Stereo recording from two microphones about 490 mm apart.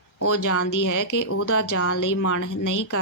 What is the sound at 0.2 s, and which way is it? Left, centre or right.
Speech, left.